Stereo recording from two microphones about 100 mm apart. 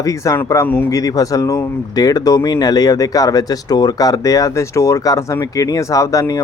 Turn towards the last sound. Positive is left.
turn(degrees=35)  # may be behind; listen again after turning